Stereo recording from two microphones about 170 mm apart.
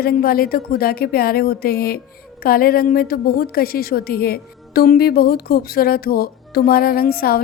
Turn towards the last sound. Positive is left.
turn(degrees=60)  # may be behind; listen again after turning